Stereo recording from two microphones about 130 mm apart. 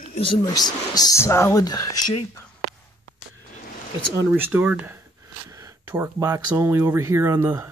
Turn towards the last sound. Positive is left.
turn(degrees=-20)  # may be behind; listen again after turning